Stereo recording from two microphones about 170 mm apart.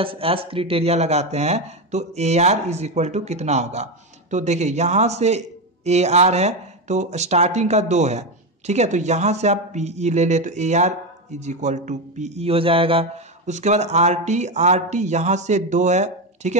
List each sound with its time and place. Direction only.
0.0 s speech: 30° right (ahead or behind)